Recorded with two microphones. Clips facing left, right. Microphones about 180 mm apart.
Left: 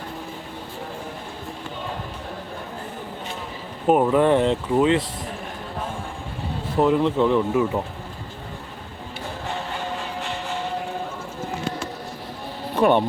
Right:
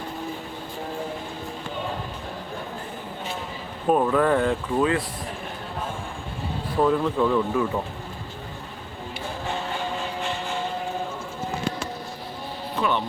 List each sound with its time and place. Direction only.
3.8 s speech: 20° left (ahead or behind)
6.7 s speech: 20° left (ahead or behind)
12.7 s speech: 50° left (ahead or behind)